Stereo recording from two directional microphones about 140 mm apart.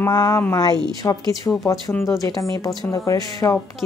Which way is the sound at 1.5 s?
10° left (ahead or behind).